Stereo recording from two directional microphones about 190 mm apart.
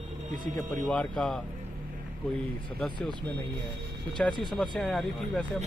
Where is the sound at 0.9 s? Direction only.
5° left (ahead or behind).